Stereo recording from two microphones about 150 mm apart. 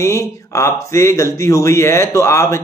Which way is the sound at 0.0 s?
20° left (ahead or behind).